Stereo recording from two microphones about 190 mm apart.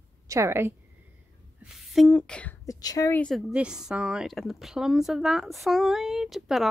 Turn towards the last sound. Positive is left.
turn(degrees=0)  # may be behind; listen again after turning